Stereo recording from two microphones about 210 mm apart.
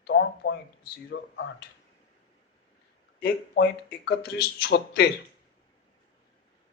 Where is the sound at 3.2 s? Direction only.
45° left (ahead or behind).